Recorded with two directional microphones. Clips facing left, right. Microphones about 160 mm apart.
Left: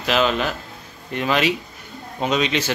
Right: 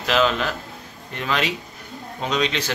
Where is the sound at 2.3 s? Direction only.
10° left (ahead or behind).